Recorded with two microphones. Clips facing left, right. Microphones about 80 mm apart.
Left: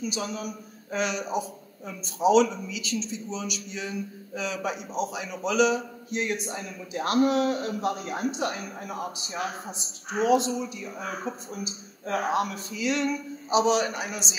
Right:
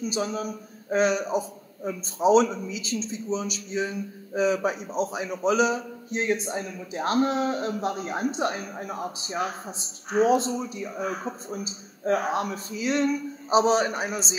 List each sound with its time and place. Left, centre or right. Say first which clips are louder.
0.1 s a man's voice: right 4 dB; right